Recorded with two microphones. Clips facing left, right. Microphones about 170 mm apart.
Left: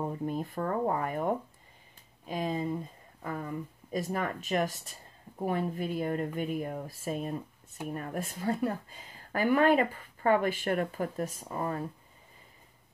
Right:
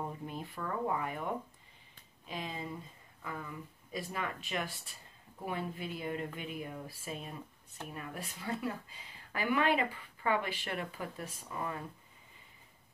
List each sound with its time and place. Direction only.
0.3 s speech: 45° left (ahead or behind)